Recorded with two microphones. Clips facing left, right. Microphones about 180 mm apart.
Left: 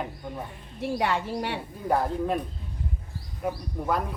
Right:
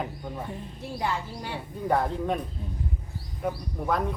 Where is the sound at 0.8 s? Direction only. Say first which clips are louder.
Left 5 dB; 75° left (ahead or behind).